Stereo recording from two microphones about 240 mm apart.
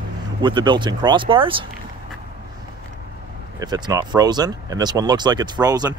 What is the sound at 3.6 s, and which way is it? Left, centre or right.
Speech, centre.